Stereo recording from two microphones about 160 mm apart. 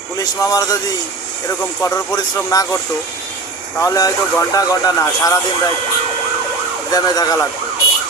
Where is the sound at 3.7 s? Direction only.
20° left (ahead or behind).